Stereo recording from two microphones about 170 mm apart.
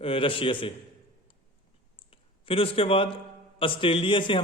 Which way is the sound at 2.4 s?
35° left (ahead or behind).